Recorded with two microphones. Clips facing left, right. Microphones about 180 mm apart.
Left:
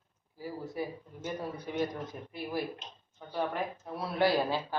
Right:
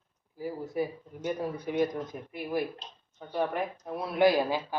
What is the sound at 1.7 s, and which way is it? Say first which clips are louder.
Speech: right 5 dB; 15° right (ahead or behind).